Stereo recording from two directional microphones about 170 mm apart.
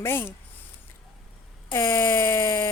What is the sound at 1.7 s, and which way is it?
Speech, 15° left (ahead or behind).